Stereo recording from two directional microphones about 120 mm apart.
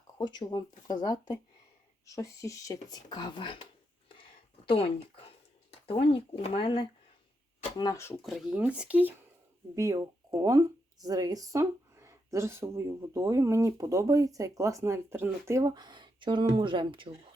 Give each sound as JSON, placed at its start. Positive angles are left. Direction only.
{"t": 0.2, "sound": "speech", "side_deg": 35}
{"t": 2.9, "sound": "speech", "side_deg": 35}
{"t": 4.7, "sound": "speech", "side_deg": 50}
{"t": 8.2, "sound": "speech", "side_deg": 0}
{"t": 8.5, "sound": "speech", "side_deg": -10}
{"t": 9.7, "sound": "speech", "side_deg": -25}